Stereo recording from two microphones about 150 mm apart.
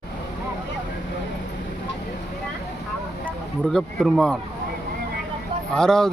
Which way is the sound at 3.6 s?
Centre (ahead or behind).